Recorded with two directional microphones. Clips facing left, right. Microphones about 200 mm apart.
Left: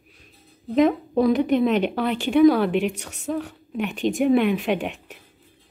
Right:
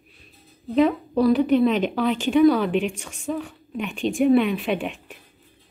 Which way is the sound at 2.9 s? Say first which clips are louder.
Left 1 dB; 70° left (ahead or behind).